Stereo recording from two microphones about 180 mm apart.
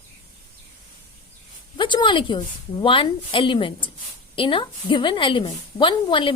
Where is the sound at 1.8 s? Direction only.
25° left (ahead or behind).